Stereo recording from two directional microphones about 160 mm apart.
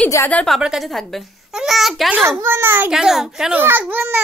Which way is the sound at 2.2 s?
15° right (ahead or behind).